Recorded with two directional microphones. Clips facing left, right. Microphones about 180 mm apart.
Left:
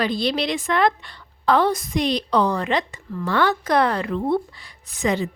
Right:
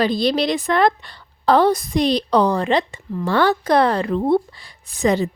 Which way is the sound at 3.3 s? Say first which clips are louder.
Right 3 dB; 35° right (ahead or behind).